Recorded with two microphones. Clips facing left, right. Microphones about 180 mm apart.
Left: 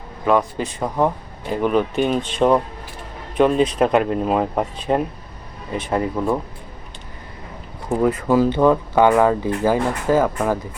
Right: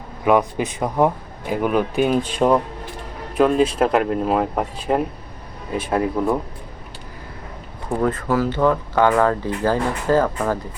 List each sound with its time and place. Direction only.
0.3 s a man's voice: 15° right (ahead or behind)
8.0 s speech: 15° left (ahead or behind)